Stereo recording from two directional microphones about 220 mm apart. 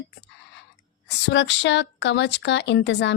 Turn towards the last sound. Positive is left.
turn(degrees=55)  # may be behind; listen again after turning